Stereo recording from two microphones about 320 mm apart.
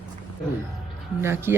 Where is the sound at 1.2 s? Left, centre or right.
Centre.